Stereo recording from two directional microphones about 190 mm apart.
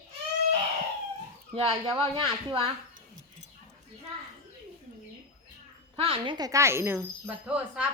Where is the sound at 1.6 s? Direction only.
30° right (ahead or behind).